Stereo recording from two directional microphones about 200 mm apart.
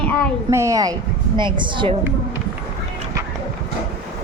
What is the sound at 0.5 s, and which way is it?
A woman's voice, 15° right (ahead or behind).